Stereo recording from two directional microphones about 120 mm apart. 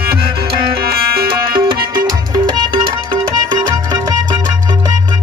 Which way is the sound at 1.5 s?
35° right (ahead or behind).